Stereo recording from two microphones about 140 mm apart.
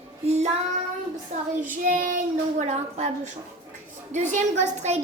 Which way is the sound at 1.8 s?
70° right (ahead or behind).